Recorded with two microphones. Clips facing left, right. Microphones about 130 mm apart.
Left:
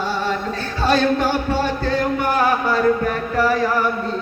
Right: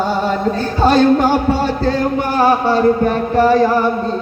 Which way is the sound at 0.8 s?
45° right (ahead or behind).